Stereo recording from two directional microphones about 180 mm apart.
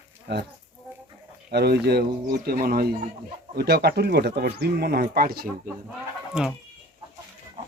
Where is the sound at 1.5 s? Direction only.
65° right (ahead or behind).